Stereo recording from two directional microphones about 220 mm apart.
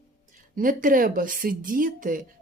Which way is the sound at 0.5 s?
40° right (ahead or behind).